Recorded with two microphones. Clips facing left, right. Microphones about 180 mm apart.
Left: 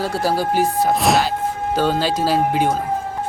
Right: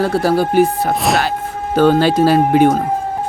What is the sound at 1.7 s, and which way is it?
Speech, 60° right (ahead or behind).